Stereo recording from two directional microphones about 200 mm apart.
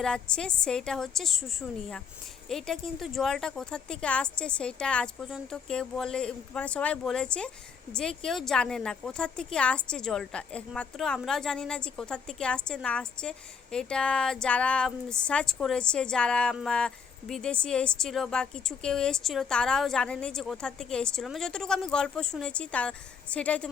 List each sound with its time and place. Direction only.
0.0 s speech: 5° left (ahead or behind)